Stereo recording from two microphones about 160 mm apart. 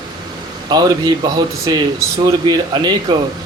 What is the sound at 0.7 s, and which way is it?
Speech, 25° right (ahead or behind).